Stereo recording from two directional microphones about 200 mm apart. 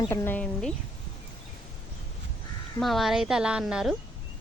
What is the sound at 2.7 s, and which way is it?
Speech, centre (ahead or behind).